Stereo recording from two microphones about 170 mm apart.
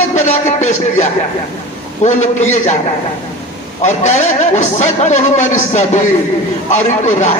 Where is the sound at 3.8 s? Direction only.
40° left (ahead or behind).